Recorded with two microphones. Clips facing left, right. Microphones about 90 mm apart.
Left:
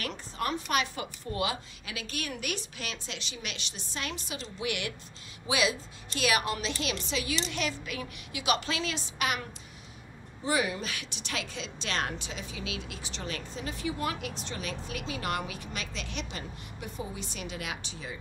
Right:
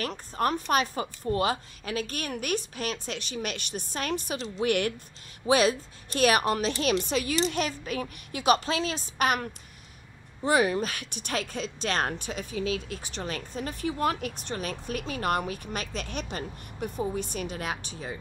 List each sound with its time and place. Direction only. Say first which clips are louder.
0.0 s a woman's voice: right 5 dB; 40° right (ahead or behind)